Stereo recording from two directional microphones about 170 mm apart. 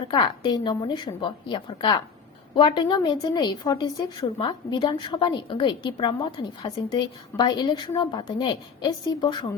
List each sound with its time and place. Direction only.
0.1 s a woman's voice: 25° left (ahead or behind)